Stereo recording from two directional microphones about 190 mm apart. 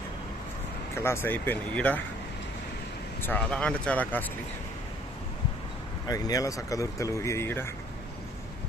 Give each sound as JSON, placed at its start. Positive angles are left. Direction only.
{"t": 0.9, "sound": "speech", "side_deg": 15}
{"t": 3.2, "sound": "speech", "side_deg": 10}
{"t": 6.1, "sound": "speech", "side_deg": 20}